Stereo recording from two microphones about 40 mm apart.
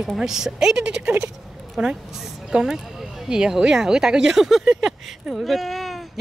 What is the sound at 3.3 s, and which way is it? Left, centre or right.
Speech, centre.